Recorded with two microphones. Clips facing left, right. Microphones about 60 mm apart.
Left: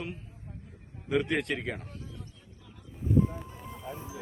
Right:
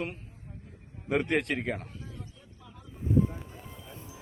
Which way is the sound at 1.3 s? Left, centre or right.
Right.